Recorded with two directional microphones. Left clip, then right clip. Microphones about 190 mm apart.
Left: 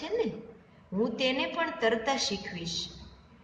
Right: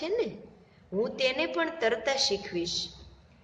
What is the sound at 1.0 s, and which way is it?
A woman's voice, 55° right (ahead or behind).